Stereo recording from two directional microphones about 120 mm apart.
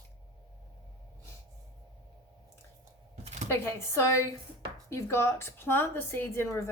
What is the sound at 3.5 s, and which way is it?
A woman's voice, 20° left (ahead or behind).